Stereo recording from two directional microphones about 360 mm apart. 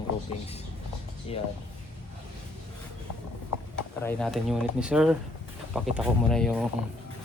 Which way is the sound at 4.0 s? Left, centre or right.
Centre.